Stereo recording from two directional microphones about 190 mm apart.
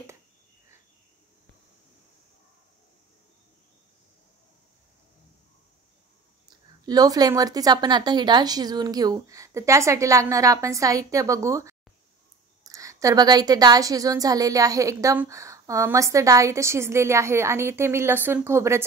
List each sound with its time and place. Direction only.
6.9 s a woman's voice: 20° right (ahead or behind)